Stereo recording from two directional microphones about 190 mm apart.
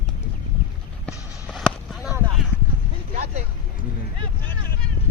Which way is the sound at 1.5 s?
Centre (ahead or behind).